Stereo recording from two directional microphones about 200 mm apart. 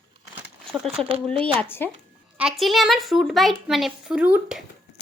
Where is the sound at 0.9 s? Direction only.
25° right (ahead or behind).